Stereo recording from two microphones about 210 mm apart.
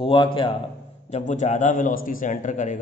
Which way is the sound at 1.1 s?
35° left (ahead or behind).